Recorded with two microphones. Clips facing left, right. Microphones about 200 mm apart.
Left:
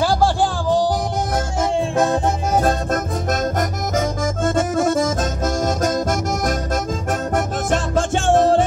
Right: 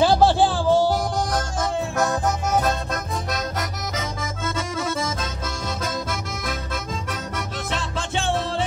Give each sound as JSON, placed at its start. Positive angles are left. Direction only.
{"t": 0.2, "sound": "music", "side_deg": 15}
{"t": 1.6, "sound": "music", "side_deg": 30}
{"t": 2.6, "sound": "accordion", "side_deg": 50}